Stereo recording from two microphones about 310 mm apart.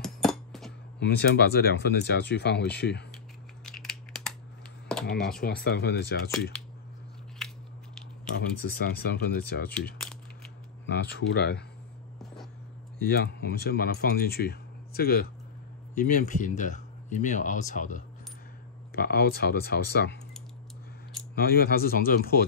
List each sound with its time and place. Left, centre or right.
0.0 s a sound: centre
0.9 s speech: left
3.6 s a sound: centre
4.8 s computer keyboard: centre
5.4 s speech: left
7.4 s scissors: centre
8.4 s speech: left
10.9 s speech: left
13.0 s speech: left
21.4 s speech: left